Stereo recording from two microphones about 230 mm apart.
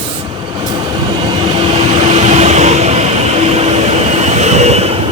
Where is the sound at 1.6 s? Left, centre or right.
Right.